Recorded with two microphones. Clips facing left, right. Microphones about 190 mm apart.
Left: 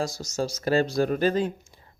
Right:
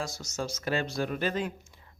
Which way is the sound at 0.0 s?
35° left (ahead or behind).